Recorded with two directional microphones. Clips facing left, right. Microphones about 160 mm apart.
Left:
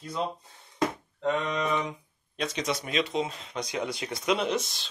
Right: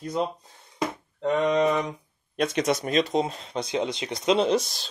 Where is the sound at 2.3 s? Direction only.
55° right (ahead or behind).